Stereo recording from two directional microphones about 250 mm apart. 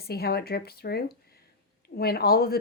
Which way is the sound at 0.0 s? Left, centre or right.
Left.